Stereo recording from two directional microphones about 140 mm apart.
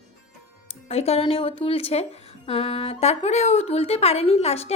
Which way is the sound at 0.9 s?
45° left (ahead or behind).